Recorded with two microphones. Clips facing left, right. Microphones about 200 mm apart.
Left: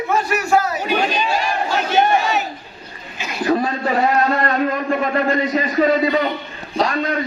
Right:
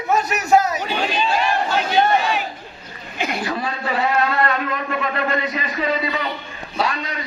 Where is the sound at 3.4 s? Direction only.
40° left (ahead or behind).